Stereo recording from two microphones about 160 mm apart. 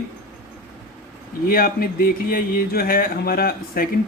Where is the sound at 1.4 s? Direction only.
65° left (ahead or behind).